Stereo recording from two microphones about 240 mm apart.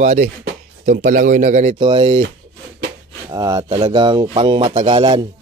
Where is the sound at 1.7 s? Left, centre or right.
Right.